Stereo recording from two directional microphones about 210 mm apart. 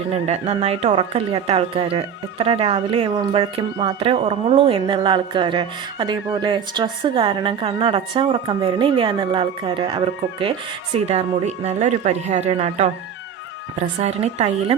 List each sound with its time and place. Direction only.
0.1 s a woman's voice: 30° right (ahead or behind)